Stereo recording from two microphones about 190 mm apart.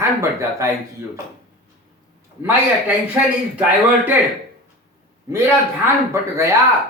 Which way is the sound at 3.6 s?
10° right (ahead or behind).